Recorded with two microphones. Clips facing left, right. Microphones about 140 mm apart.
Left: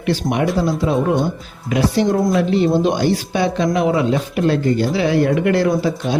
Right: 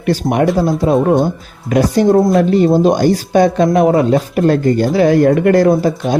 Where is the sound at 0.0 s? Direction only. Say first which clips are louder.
Right 5 dB; 45° right (ahead or behind).